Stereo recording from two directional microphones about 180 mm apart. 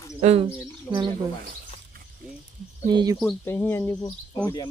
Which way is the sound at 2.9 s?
25° right (ahead or behind).